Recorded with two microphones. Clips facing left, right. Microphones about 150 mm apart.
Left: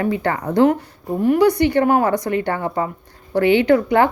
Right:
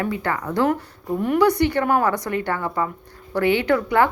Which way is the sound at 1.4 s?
15° left (ahead or behind).